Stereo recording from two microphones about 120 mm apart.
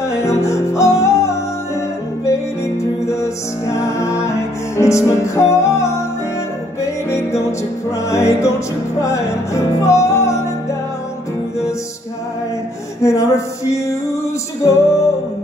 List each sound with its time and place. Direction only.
0.1 s music: 25° left (ahead or behind)
13.0 s music: 25° left (ahead or behind)